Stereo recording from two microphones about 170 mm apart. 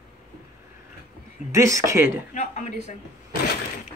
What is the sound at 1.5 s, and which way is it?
Speech, 15° right (ahead or behind).